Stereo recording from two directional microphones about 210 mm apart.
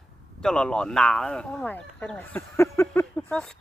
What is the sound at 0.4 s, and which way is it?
Speech, 5° left (ahead or behind).